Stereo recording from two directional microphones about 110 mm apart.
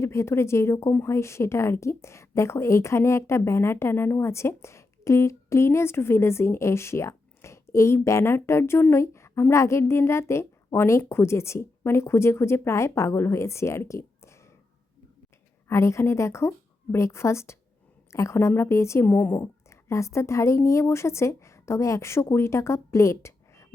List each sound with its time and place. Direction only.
0.0 s a woman's voice: 25° left (ahead or behind)
15.7 s a woman's voice: 25° left (ahead or behind)
19.0 s speech: 15° left (ahead or behind)
19.4 s a woman's voice: 25° left (ahead or behind)